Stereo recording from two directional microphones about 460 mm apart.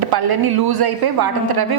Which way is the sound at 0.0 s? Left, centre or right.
Right.